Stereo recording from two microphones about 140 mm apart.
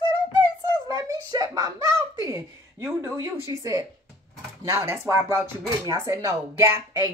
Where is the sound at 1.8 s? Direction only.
30° left (ahead or behind).